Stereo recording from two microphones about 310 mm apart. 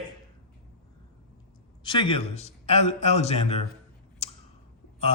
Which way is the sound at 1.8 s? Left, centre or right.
Centre.